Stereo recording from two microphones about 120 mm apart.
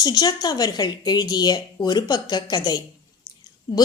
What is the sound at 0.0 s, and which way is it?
A woman's voice, 30° left (ahead or behind).